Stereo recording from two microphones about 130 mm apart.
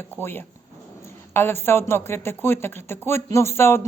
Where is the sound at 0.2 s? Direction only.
15° left (ahead or behind).